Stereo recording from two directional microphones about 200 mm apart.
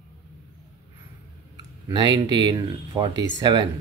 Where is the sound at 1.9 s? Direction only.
20° right (ahead or behind).